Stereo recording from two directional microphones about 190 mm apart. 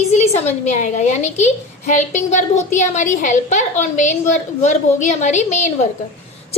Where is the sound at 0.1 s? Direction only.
35° left (ahead or behind).